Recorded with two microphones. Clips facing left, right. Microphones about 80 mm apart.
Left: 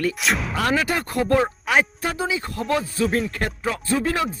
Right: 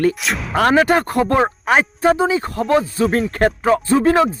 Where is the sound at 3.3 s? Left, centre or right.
Right.